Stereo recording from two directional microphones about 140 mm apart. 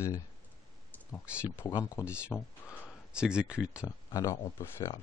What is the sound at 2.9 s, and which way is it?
Speech, 5° right (ahead or behind).